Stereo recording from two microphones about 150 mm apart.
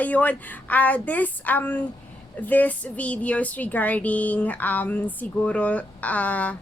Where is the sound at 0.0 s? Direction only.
10° left (ahead or behind).